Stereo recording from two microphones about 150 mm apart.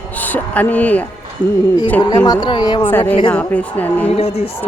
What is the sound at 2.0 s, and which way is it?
Speech, 25° left (ahead or behind).